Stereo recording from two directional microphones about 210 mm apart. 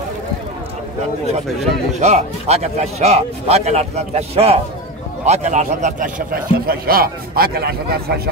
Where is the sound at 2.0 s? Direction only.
30° right (ahead or behind).